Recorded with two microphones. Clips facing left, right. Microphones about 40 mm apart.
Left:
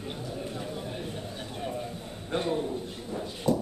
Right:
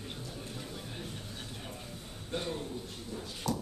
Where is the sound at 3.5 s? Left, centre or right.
Centre.